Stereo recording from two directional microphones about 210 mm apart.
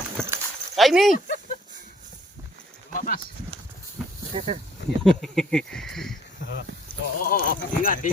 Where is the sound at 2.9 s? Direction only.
40° left (ahead or behind).